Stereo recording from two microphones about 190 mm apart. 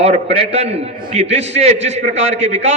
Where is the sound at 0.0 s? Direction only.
30° right (ahead or behind).